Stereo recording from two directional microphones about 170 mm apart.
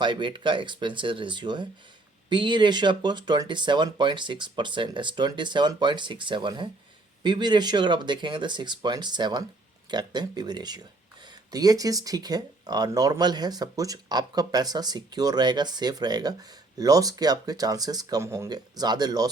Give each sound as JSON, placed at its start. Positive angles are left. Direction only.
{"t": 0.0, "sound": "speech", "side_deg": -25}